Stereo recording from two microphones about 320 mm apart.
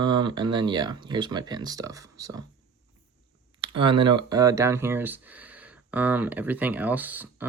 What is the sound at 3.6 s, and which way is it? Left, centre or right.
Speech, centre.